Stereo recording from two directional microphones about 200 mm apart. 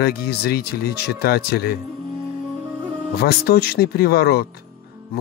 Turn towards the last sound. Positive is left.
turn(degrees=50)  # may be behind; listen again after turning